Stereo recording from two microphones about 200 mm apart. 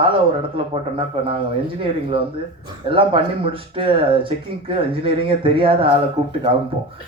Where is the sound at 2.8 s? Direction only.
25° right (ahead or behind).